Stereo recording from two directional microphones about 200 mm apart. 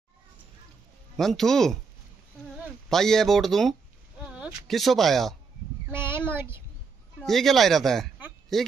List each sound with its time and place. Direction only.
1.1 s speech: centre (ahead or behind)
2.9 s speech: centre (ahead or behind)
5.9 s child singing: 10° right (ahead or behind)
7.2 s speech: centre (ahead or behind)